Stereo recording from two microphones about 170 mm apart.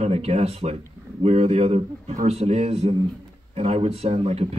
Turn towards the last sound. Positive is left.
turn(degrees=-35)  # may be behind; listen again after turning